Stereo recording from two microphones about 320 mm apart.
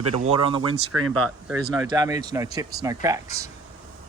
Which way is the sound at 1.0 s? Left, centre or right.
Right.